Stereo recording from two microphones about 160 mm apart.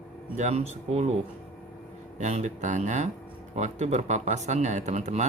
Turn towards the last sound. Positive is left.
turn(degrees=-45)  # may be behind; listen again after turning